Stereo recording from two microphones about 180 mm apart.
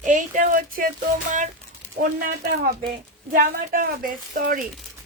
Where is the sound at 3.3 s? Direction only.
50° right (ahead or behind).